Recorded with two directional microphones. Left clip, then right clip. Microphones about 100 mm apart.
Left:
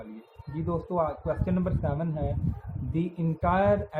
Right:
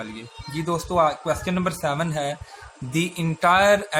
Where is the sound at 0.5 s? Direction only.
35° right (ahead or behind).